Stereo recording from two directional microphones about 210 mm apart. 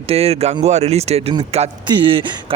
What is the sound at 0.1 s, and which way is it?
Speech, 30° right (ahead or behind).